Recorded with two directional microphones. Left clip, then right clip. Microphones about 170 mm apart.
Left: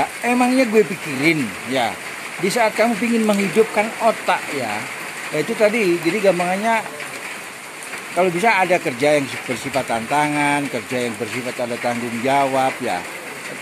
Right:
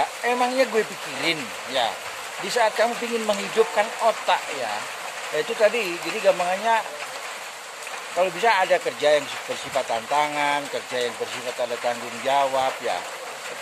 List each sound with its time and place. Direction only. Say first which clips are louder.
0.2 s speech: left 4 dB; 20° left (ahead or behind)
5.6 s speech: left 5 dB; 20° left (ahead or behind)
8.2 s speech: left 4 dB; 20° left (ahead or behind)